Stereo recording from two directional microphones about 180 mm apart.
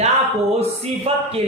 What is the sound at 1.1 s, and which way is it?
Speech, 35° right (ahead or behind).